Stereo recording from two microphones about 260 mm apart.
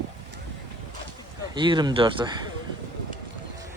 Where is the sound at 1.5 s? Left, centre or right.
Centre.